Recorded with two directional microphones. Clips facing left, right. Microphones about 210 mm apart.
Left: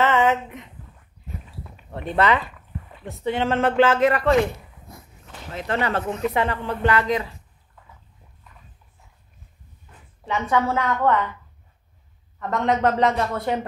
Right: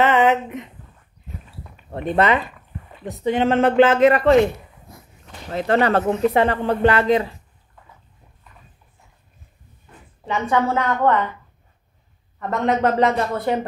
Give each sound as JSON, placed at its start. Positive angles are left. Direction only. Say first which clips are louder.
{"t": 0.0, "sound": "a sound", "louder": "right 3 dB", "side_deg": -15}
{"t": 2.0, "sound": "speech", "louder": "right 2 dB", "side_deg": -20}
{"t": 5.5, "sound": "speech", "louder": "right 7 dB", "side_deg": -35}
{"t": 10.2, "sound": "a woman's voice", "louder": "right 2 dB", "side_deg": 0}
{"t": 12.4, "sound": "a woman's voice", "louder": "right 2 dB", "side_deg": -5}